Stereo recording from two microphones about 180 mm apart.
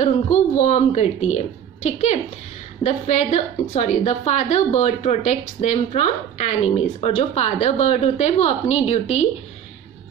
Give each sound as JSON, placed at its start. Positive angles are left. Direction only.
{"t": 0.0, "sound": "a woman's voice", "side_deg": 40}